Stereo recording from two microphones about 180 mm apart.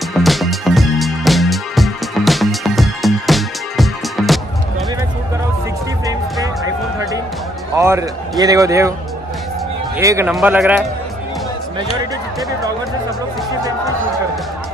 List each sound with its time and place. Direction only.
0.1 s music: centre (ahead or behind)
7.7 s a man's voice: 15° right (ahead or behind)
9.9 s speech: 15° right (ahead or behind)